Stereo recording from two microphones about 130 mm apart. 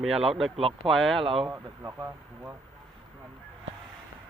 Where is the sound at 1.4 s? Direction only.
20° right (ahead or behind).